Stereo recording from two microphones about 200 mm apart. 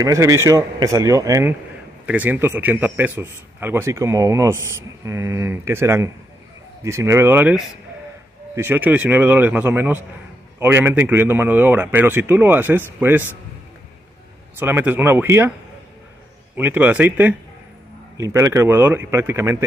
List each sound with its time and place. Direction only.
0.0 s a man's voice: 15° right (ahead or behind)
14.6 s a man's voice: 10° right (ahead or behind)
16.5 s a man's voice: 10° right (ahead or behind)